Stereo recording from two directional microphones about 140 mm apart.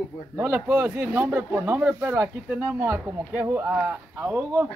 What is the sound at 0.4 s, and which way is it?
Speech, 15° right (ahead or behind).